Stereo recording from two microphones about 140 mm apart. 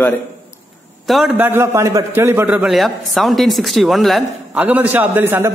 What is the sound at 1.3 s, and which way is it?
A man's voice, 15° right (ahead or behind).